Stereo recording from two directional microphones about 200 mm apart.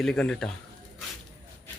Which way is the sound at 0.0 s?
5° left (ahead or behind).